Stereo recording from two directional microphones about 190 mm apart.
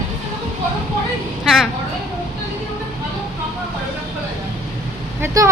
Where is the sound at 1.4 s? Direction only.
Centre (ahead or behind).